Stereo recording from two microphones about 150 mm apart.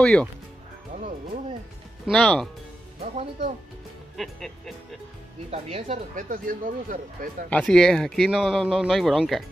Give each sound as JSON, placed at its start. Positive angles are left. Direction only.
{"t": 0.0, "sound": "speech", "side_deg": 5}
{"t": 2.0, "sound": "speech", "side_deg": 5}
{"t": 4.2, "sound": "speech", "side_deg": 0}
{"t": 5.5, "sound": "speech", "side_deg": -45}
{"t": 7.4, "sound": "speech", "side_deg": 5}